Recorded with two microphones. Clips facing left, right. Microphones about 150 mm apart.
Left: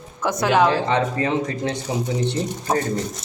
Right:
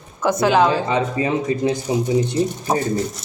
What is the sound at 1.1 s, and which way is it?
Speech, 10° right (ahead or behind).